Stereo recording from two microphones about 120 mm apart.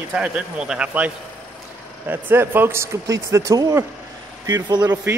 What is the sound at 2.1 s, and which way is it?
Speech, 15° right (ahead or behind).